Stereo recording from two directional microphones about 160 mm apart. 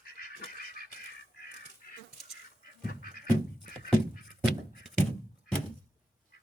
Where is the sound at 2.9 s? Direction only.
70° left (ahead or behind).